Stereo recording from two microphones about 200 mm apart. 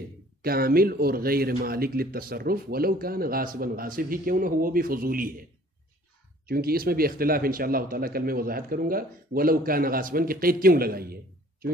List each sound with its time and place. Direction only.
0.4 s speech: 50° right (ahead or behind)
6.4 s speech: 50° right (ahead or behind)